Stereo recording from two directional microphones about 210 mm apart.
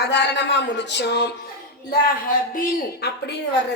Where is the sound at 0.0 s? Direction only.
55° left (ahead or behind).